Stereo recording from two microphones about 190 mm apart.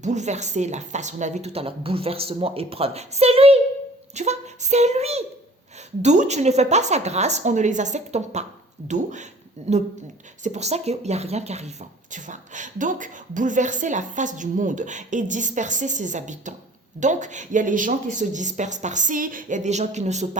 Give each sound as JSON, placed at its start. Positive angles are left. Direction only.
{"t": 0.0, "sound": "speech", "side_deg": -40}
{"t": 9.7, "sound": "speech", "side_deg": -35}